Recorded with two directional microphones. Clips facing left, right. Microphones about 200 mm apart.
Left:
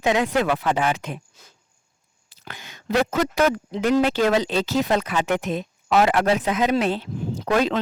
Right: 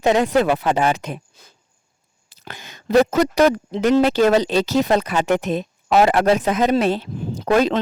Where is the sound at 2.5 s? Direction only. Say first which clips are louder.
Right 5 dB; 40° right (ahead or behind).